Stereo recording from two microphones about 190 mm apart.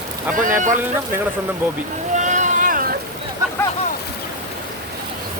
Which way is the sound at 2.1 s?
40° right (ahead or behind).